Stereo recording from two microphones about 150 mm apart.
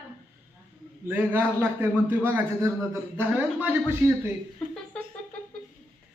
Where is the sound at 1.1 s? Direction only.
15° right (ahead or behind).